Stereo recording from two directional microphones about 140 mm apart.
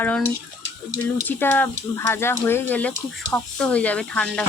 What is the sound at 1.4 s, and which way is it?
Speech, 15° left (ahead or behind).